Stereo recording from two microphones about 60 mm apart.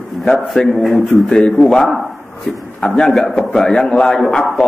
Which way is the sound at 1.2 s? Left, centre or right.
Centre.